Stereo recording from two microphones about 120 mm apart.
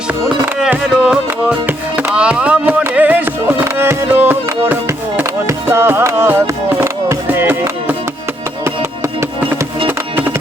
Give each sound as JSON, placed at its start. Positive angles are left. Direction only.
{"t": 0.4, "sound": "music", "side_deg": -15}
{"t": 1.0, "sound": "music", "side_deg": -5}
{"t": 1.6, "sound": "music", "side_deg": -15}